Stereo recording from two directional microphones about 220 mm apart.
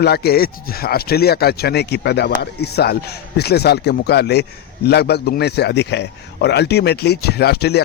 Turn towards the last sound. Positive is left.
turn(degrees=45)  # may be behind; listen again after turning